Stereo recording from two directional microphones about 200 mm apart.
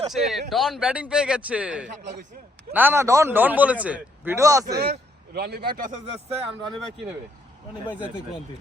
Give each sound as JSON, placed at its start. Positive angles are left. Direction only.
{"t": 0.1, "sound": "a man's voice", "side_deg": 0}
{"t": 4.8, "sound": "a man's voice", "side_deg": -50}
{"t": 7.9, "sound": "a man's voice", "side_deg": -5}